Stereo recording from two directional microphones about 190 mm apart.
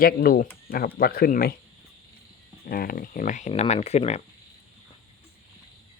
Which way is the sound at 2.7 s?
50° left (ahead or behind).